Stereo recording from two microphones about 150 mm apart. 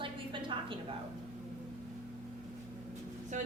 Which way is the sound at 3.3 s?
55° right (ahead or behind).